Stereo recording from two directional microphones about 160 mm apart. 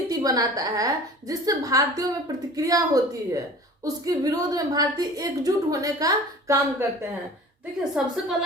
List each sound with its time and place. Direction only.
0.1 s a woman's voice: 25° right (ahead or behind)
8.0 s a woman's voice: 5° right (ahead or behind)